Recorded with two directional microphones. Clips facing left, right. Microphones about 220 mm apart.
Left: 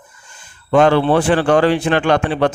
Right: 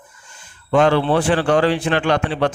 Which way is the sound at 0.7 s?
50° left (ahead or behind).